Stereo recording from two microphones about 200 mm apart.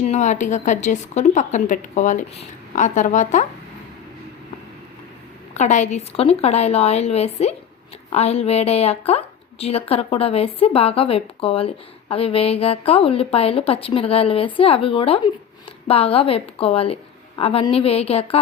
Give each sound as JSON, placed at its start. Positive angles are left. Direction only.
{"t": 0.0, "sound": "a woman's voice", "side_deg": 35}
{"t": 5.5, "sound": "a woman's voice", "side_deg": 35}